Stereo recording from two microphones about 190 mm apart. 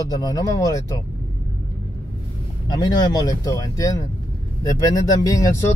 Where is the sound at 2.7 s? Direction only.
20° left (ahead or behind).